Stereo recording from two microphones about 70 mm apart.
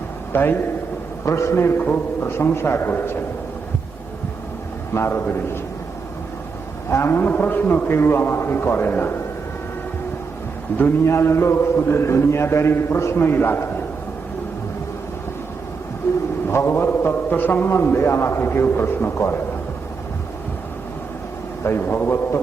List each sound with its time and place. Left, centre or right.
0.3 s a man's voice: left
1.2 s a man's voice: left
4.9 s a man's voice: left
6.9 s a man's voice: left
10.7 s a man's voice: left
11.0 s a man's voice: left
16.5 s a man's voice: left
21.6 s a man's voice: left